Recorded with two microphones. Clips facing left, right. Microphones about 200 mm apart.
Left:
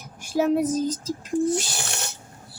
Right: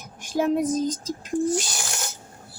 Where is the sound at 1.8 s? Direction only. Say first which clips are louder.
Left 1 dB; 65° left (ahead or behind).